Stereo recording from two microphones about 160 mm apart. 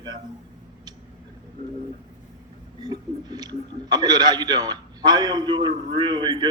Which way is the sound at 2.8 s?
25° right (ahead or behind).